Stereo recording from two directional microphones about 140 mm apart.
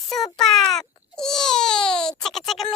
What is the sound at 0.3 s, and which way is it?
Baby cry, centre (ahead or behind).